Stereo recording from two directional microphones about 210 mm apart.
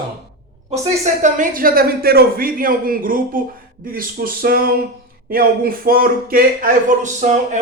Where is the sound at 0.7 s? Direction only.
35° right (ahead or behind).